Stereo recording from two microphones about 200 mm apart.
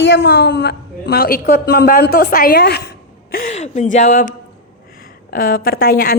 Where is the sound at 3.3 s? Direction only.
40° left (ahead or behind).